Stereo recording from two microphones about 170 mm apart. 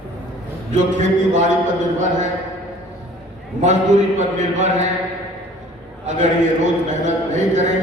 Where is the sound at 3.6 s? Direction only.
45° right (ahead or behind).